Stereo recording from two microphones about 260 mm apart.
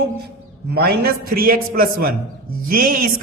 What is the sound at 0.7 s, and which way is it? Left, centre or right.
A man's voice, right.